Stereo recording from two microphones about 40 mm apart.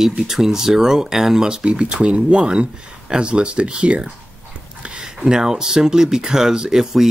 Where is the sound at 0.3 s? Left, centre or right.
Centre.